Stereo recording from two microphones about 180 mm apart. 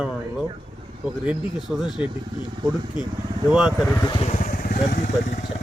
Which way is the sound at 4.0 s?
25° left (ahead or behind).